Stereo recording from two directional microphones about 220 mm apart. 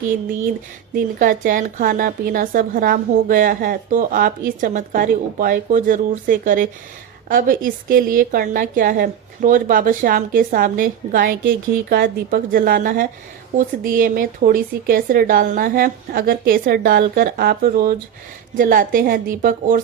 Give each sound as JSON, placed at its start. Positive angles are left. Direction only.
{"t": 0.9, "sound": "a woman's voice", "side_deg": -40}